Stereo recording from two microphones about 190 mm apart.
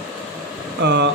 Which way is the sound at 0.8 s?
60° right (ahead or behind).